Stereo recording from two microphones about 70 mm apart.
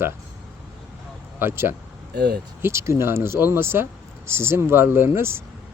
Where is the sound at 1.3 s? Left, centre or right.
Right.